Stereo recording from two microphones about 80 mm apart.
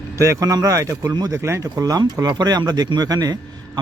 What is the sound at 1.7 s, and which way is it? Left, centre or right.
A man's voice, right.